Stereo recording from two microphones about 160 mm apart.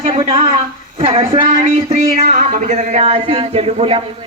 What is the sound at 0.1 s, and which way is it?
Speech, 35° right (ahead or behind).